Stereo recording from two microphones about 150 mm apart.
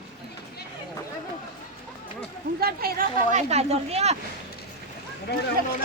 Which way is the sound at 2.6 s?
90° right.